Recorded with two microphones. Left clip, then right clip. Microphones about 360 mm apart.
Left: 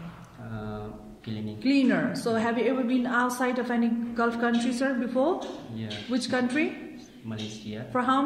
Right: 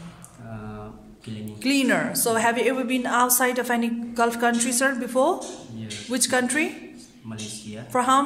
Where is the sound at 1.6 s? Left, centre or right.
Centre.